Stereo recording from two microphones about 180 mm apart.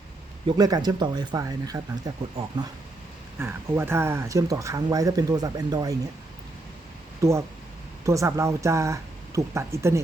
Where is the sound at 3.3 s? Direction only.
15° right (ahead or behind).